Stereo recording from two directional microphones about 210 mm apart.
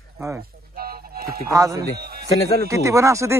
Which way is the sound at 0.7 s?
45° right (ahead or behind).